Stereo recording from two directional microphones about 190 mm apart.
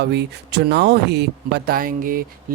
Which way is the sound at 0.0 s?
60° right (ahead or behind).